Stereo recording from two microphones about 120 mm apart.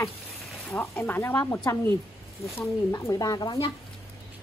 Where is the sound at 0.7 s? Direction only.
15° left (ahead or behind).